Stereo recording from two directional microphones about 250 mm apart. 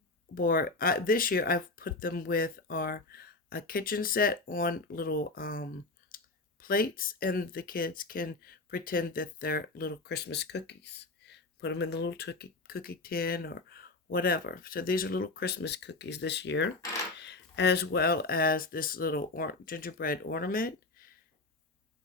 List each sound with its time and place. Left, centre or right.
0.3 s speech: left